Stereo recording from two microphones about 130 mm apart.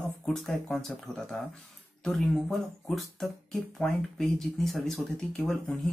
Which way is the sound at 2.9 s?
5° left (ahead or behind).